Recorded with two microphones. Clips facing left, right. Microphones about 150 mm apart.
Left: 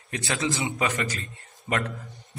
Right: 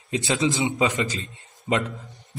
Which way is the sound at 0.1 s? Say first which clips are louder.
Right 5 dB; 20° right (ahead or behind).